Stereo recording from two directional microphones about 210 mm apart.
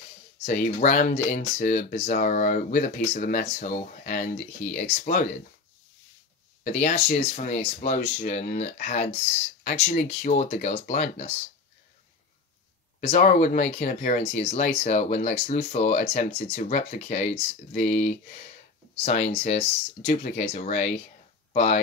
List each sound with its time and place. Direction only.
0.5 s speech: 40° left (ahead or behind)
6.6 s speech: 35° left (ahead or behind)
13.0 s speech: 35° left (ahead or behind)